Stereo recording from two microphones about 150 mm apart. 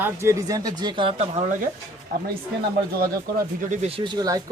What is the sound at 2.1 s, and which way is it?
Speech, 80° right.